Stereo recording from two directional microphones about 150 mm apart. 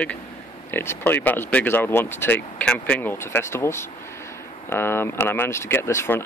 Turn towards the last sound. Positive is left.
turn(degrees=15)  # may be behind; listen again after turning